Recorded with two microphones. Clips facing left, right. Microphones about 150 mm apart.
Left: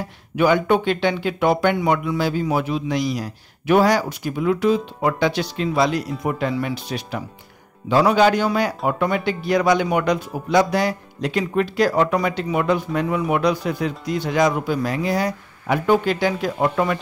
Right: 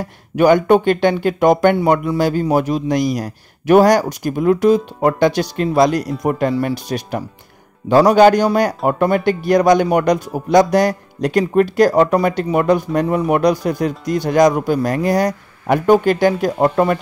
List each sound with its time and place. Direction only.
0.4 s a man's voice: 45° right (ahead or behind)